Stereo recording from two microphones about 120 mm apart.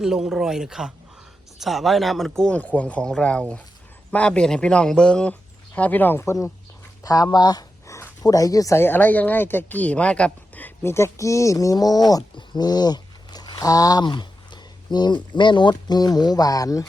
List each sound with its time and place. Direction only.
0.0 s speech: 5° right (ahead or behind); by 16.8 s 30° left (ahead or behind)